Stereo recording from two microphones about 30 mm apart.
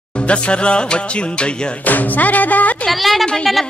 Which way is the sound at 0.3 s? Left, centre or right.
Left.